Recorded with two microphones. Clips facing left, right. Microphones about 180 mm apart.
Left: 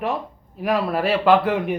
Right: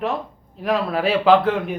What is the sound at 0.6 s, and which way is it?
Speech, 5° left (ahead or behind).